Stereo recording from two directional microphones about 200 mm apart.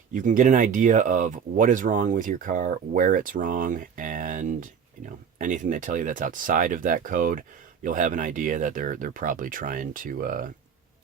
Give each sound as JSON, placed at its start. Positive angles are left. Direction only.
{"t": 0.1, "sound": "speech", "side_deg": -40}